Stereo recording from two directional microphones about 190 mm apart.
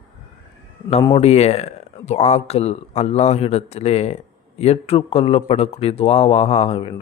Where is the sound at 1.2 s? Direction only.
35° left (ahead or behind).